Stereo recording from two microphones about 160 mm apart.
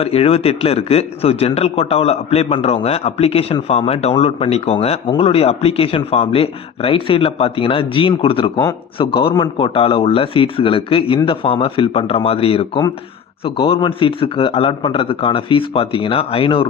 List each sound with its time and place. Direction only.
0.0 s a man's voice: 35° left (ahead or behind)